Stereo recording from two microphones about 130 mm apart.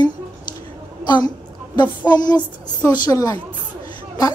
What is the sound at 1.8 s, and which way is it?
A woman's voice, 30° left (ahead or behind).